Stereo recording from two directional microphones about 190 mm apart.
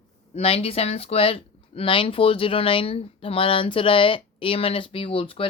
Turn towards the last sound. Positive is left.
turn(degrees=30)  # may be behind; listen again after turning